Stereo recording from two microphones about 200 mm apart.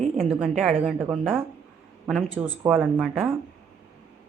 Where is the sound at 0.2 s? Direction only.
5° right (ahead or behind).